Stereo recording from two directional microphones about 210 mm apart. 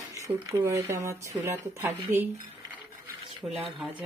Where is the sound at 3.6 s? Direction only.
5° right (ahead or behind).